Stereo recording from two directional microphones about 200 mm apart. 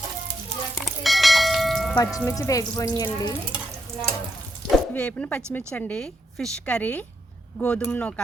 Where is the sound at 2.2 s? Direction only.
15° left (ahead or behind).